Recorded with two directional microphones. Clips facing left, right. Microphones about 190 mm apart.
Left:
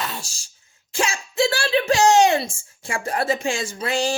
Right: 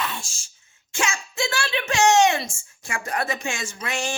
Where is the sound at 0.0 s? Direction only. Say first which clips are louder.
Even; 40° left (ahead or behind).